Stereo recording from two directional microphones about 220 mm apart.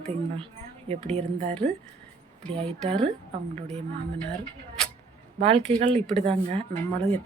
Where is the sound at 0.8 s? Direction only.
30° right (ahead or behind).